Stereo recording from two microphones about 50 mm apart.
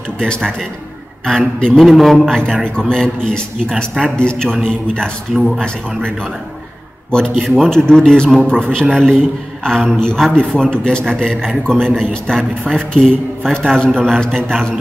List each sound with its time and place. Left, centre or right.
1.2 s speech: centre
1.9 s a man's voice: centre
7.1 s a man's voice: centre